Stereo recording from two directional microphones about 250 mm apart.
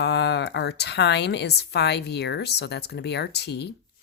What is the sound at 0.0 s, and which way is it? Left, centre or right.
A woman's voice, left.